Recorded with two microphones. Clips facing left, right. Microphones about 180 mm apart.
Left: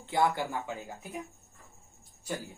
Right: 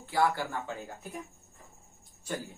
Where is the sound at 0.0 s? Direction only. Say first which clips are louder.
Even; 20° left (ahead or behind).